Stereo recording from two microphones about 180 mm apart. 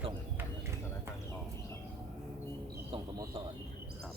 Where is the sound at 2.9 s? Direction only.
30° right (ahead or behind).